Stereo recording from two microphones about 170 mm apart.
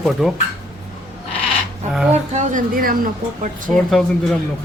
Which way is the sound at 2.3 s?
45° right (ahead or behind).